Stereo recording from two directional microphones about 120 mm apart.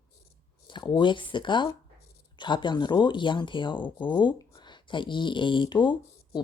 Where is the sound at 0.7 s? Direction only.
40° left (ahead or behind).